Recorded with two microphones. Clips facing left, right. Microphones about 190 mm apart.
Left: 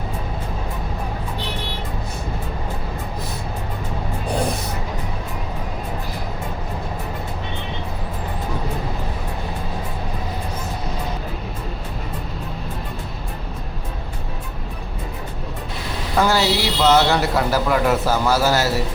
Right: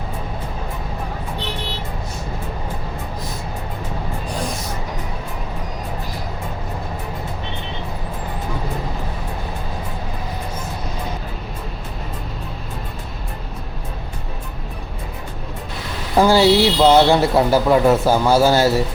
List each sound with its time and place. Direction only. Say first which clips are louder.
16.1 s a man's voice: right 6 dB; 30° right (ahead or behind)